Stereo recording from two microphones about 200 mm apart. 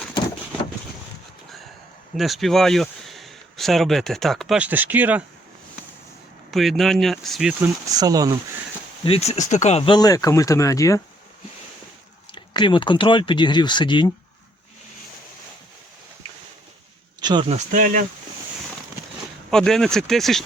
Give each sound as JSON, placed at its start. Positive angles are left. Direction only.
{"t": 2.1, "sound": "speech", "side_deg": 0}
{"t": 6.5, "sound": "speech", "side_deg": 0}
{"t": 7.9, "sound": "speech", "side_deg": -20}
{"t": 9.0, "sound": "speech", "side_deg": 30}
{"t": 12.3, "sound": "speech", "side_deg": 25}
{"t": 17.2, "sound": "speech", "side_deg": -20}
{"t": 17.7, "sound": "speech", "side_deg": -45}
{"t": 19.5, "sound": "speech", "side_deg": 5}